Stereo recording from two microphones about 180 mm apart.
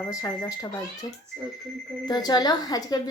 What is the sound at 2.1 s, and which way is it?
Speech, 20° left (ahead or behind).